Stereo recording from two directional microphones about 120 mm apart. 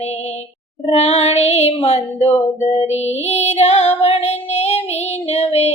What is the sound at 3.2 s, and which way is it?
Female singing, 60° left (ahead or behind).